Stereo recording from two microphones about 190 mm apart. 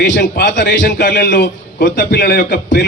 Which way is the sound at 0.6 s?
50° left (ahead or behind).